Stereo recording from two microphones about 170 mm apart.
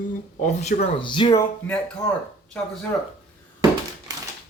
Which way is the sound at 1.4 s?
10° left (ahead or behind).